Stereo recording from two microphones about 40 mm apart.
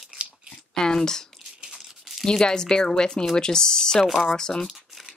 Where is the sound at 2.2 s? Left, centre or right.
Centre.